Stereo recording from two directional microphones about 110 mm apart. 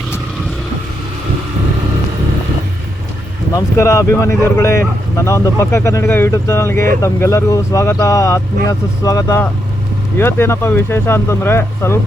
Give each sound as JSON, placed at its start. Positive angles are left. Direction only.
{"t": 3.5, "sound": "speech", "side_deg": 30}